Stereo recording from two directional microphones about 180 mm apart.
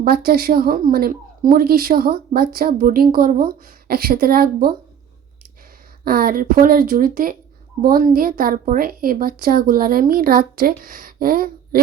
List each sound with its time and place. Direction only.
0.0 s a woman's voice: 55° right (ahead or behind)
6.1 s a woman's voice: 55° right (ahead or behind)